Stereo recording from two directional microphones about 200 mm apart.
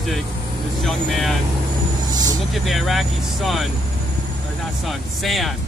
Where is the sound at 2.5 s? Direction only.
Centre (ahead or behind).